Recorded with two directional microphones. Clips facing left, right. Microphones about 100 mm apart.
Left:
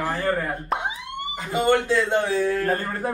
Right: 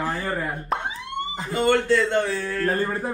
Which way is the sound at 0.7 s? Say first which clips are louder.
Even; centre (ahead or behind).